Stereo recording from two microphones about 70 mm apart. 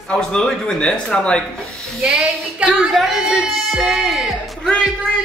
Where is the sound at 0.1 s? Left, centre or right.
Centre.